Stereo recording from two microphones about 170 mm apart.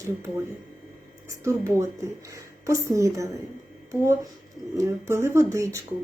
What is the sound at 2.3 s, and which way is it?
Speech, 20° right (ahead or behind).